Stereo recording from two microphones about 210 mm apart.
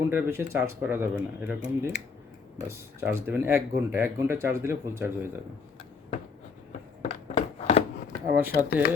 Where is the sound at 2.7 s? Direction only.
10° right (ahead or behind).